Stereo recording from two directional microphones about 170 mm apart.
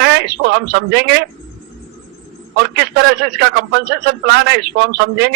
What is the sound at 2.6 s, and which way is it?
A man's voice, 70° right (ahead or behind).